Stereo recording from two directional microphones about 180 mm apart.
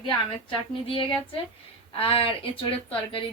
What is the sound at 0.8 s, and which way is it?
A woman's voice, 30° left (ahead or behind).